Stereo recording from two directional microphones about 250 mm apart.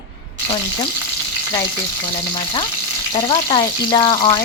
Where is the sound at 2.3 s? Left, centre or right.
Centre.